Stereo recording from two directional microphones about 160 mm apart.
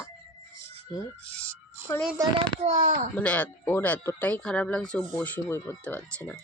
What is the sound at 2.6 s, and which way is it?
Speech, 50° right (ahead or behind).